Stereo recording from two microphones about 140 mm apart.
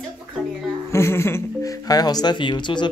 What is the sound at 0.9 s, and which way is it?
Speech, 20° left (ahead or behind).